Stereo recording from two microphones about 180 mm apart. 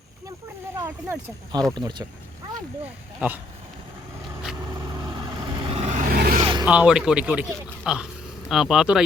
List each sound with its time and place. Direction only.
0.8 s speech: 15° right (ahead or behind)
1.7 s speech: 25° right (ahead or behind)
2.8 s speech: 10° right (ahead or behind)
4.5 s vehicle: 20° right (ahead or behind); by 6.4 s 55° right (ahead or behind)
6.4 s vehicle: 25° right (ahead or behind)
6.7 s speech: 5° right (ahead or behind)